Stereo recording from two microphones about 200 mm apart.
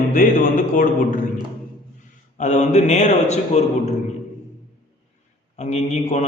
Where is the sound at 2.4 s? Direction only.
35° left (ahead or behind).